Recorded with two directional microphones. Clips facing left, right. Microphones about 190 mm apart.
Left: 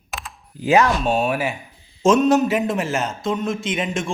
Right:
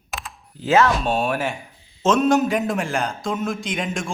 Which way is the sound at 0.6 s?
15° left (ahead or behind).